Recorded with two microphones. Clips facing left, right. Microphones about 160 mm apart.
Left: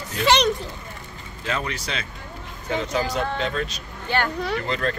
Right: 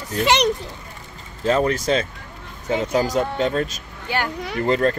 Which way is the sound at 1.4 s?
40° right (ahead or behind).